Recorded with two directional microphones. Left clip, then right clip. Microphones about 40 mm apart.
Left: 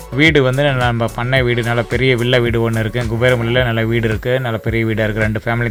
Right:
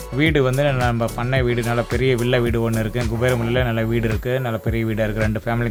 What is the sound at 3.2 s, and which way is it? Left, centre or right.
Speech, centre.